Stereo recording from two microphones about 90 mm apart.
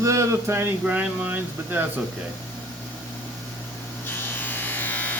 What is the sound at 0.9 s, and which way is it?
Speech, 20° right (ahead or behind).